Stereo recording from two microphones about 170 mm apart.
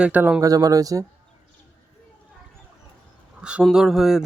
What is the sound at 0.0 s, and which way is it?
Speech, 10° right (ahead or behind).